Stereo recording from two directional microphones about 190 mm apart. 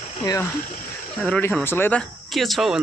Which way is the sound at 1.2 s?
10° left (ahead or behind).